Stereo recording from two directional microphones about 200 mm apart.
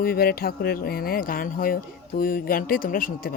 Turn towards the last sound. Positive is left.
turn(degrees=45)  # may be behind; listen again after turning